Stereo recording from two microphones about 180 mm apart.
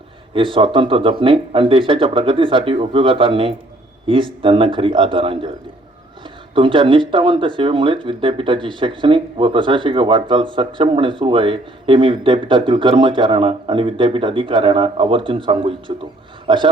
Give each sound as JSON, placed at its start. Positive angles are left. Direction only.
{"t": 0.3, "sound": "speech", "side_deg": -30}
{"t": 6.5, "sound": "speech", "side_deg": -30}